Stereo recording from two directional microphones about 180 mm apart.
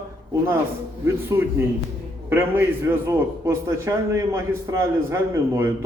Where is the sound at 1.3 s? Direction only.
15° right (ahead or behind).